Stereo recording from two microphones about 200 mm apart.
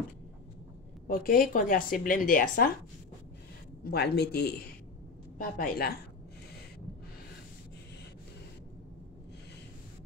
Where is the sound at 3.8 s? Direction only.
55° left (ahead or behind).